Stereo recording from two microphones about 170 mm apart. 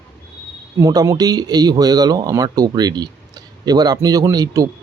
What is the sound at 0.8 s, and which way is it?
Speech, 20° right (ahead or behind).